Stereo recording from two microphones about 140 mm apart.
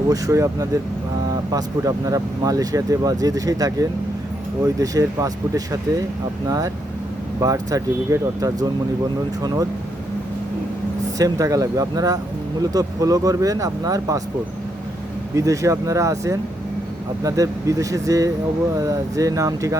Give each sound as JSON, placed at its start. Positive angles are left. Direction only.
{"t": 0.1, "sound": "speech", "side_deg": -20}
{"t": 7.4, "sound": "speech", "side_deg": -25}
{"t": 11.2, "sound": "speech", "side_deg": -25}
{"t": 15.4, "sound": "speech", "side_deg": -20}